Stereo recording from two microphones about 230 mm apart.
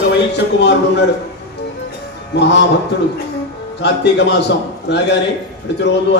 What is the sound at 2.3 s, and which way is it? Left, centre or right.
Speech, left.